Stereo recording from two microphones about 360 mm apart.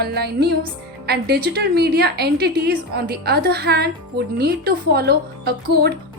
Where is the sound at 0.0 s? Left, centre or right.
Right.